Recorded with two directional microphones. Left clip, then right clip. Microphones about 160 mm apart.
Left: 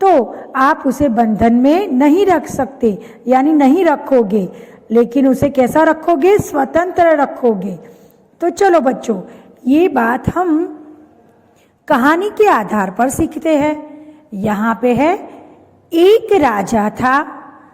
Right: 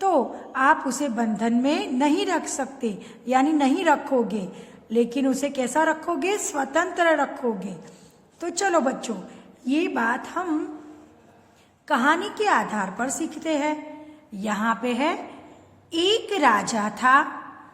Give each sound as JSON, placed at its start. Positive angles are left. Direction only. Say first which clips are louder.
{"t": 0.0, "sound": "a woman's voice", "louder": "left 11 dB", "side_deg": 30}
{"t": 11.9, "sound": "a woman's voice", "louder": "left 9 dB", "side_deg": 40}
{"t": 14.3, "sound": "a woman's voice", "louder": "left 8 dB", "side_deg": 35}